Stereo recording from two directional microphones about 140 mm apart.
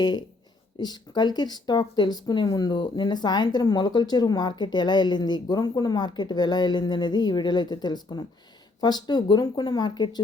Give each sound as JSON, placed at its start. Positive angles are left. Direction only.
{"t": 0.0, "sound": "speech", "side_deg": 30}